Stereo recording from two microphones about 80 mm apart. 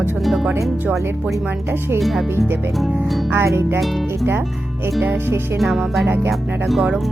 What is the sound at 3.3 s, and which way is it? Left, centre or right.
Music, right.